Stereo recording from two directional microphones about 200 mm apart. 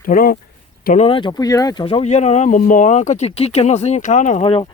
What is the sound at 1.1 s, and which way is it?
Speech, 20° left (ahead or behind).